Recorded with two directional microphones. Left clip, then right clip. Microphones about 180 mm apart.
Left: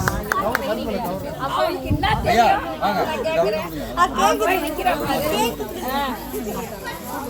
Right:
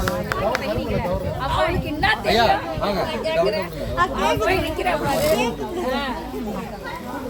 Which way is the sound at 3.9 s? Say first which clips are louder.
Left 3 dB; 25° left (ahead or behind).